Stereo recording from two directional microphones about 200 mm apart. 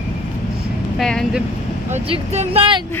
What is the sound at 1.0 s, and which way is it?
Speech, centre (ahead or behind).